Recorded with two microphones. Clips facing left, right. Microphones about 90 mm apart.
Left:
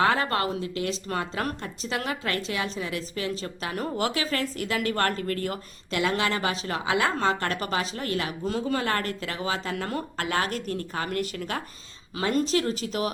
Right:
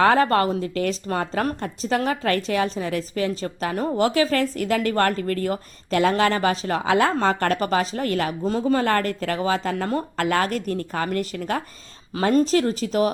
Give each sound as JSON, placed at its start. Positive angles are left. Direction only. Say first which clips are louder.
{"t": 0.0, "sound": "speech", "louder": "right 6 dB", "side_deg": -45}